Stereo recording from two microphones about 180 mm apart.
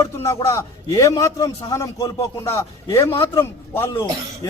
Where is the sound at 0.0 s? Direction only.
15° left (ahead or behind).